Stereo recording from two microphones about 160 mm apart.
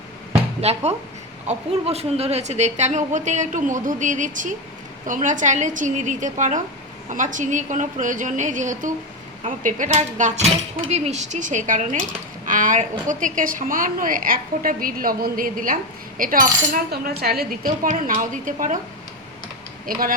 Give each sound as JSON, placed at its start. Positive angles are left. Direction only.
{"t": 0.6, "sound": "a woman's voice", "side_deg": -40}
{"t": 19.9, "sound": "a woman's voice", "side_deg": -65}